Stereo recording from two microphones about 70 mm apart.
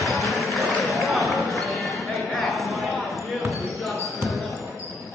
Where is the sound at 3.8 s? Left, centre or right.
Centre.